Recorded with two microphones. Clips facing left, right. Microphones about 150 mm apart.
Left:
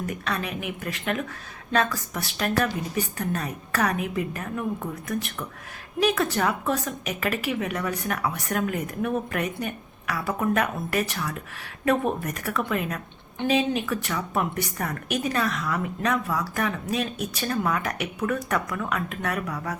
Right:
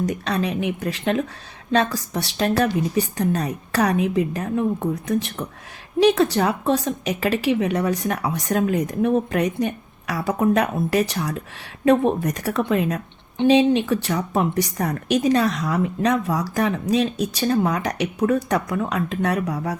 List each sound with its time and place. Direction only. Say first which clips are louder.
0.0 s a woman's voice: right 7 dB; 30° right (ahead or behind)